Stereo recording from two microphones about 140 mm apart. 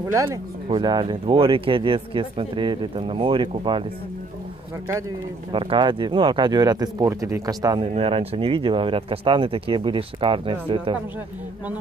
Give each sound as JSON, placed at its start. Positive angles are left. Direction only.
{"t": 0.1, "sound": "speech", "side_deg": -20}
{"t": 0.7, "sound": "speech", "side_deg": -30}
{"t": 5.5, "sound": "speech", "side_deg": -40}
{"t": 7.8, "sound": "speech", "side_deg": -40}